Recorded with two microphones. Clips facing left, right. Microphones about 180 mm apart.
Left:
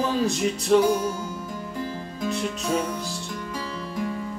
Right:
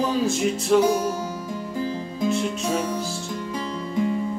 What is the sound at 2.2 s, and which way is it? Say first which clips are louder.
Music: right 4 dB; centre (ahead or behind).